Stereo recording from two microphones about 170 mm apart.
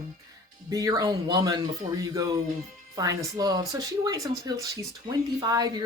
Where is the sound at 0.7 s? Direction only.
20° right (ahead or behind).